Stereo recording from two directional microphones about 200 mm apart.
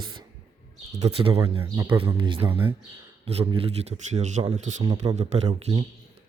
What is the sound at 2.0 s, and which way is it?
Speech, 25° right (ahead or behind).